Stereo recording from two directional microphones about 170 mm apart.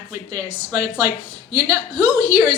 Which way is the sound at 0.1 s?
20° right (ahead or behind).